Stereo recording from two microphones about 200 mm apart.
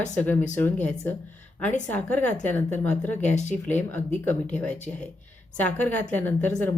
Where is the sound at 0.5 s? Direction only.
5° left (ahead or behind).